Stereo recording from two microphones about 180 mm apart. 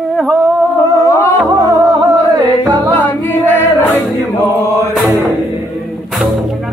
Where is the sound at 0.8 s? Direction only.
20° left (ahead or behind).